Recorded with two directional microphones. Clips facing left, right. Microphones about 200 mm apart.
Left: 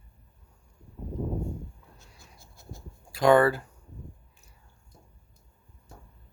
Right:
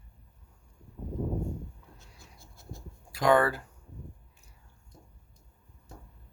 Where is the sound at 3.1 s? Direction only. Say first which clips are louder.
Left 4 dB; 30° left (ahead or behind).